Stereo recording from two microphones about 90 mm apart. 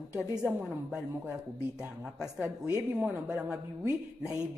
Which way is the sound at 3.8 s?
30° right (ahead or behind).